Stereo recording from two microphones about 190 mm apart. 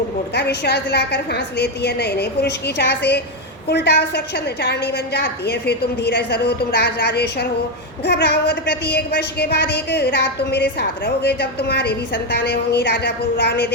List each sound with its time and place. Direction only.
0.3 s a woman's voice: 60° left (ahead or behind)